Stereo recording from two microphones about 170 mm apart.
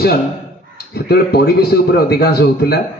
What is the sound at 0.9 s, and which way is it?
A man's voice, 65° left (ahead or behind).